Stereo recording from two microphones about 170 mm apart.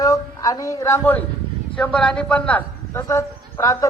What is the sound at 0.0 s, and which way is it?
A man's voice, 20° left (ahead or behind).